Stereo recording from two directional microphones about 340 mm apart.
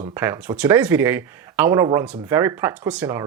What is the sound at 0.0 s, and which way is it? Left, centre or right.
Speech, centre.